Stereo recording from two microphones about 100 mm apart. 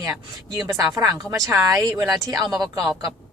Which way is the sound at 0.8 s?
35° right (ahead or behind).